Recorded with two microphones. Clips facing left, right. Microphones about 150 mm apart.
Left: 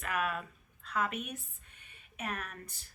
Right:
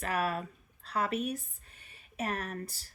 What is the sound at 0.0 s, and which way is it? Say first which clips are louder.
A woman's voice: right 3 dB; 35° right (ahead or behind).